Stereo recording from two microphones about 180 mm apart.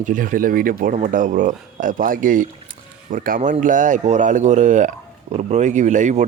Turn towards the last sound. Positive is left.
turn(degrees=-40)  # may be behind; listen again after turning